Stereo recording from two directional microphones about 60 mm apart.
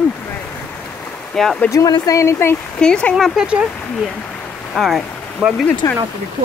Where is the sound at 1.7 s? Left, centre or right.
Left.